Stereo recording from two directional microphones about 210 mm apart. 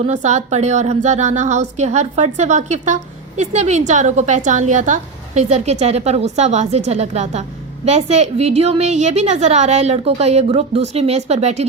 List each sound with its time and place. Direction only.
0.0 s a woman's voice: 30° right (ahead or behind)